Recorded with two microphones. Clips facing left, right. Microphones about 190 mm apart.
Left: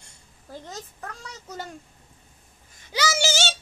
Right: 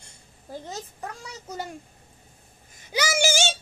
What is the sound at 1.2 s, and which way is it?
Speech, 10° right (ahead or behind).